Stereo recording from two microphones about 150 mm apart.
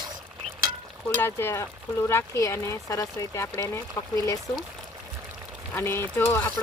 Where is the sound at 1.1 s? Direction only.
15° left (ahead or behind).